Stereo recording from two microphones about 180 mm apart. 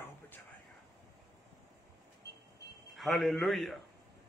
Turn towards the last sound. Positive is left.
turn(degrees=0)  # may be behind; listen again after turning